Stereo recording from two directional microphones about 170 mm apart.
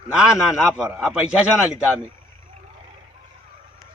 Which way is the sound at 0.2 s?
5° right (ahead or behind).